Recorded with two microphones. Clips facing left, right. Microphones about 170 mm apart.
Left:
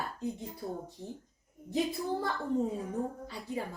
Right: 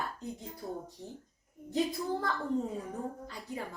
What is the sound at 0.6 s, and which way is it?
Speech, 20° left (ahead or behind).